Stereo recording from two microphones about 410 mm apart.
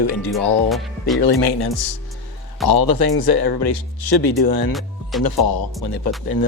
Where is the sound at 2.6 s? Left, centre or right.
Left.